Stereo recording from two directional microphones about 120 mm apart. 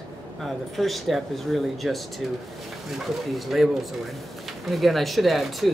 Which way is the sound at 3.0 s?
Centre (ahead or behind).